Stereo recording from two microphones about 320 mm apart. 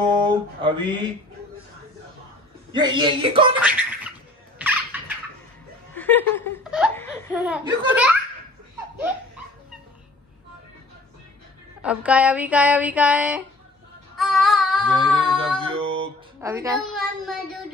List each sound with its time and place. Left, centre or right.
0.6 s speech: centre
2.7 s speech: centre
3.5 s speech: centre
4.6 s a sound: centre
5.9 s speech: centre
11.8 s speech: centre
14.1 s music: centre
14.9 s singing: centre
15.6 s music: centre
16.0 s a sound: centre
16.9 s speech: centre